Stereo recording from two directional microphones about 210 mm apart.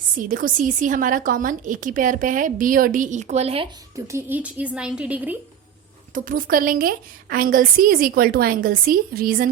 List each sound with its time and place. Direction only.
0.2 s a woman's voice: 40° right (ahead or behind)
3.9 s a woman's voice: 15° right (ahead or behind)
6.1 s a woman's voice: 40° right (ahead or behind)